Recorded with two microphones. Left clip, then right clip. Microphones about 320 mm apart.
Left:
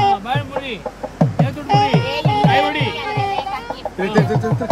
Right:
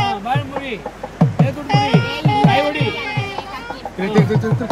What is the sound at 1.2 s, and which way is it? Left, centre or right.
Music, left.